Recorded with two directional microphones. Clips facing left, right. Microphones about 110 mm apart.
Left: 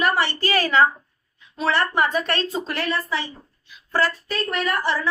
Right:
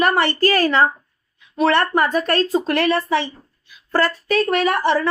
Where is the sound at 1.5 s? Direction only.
60° right (ahead or behind).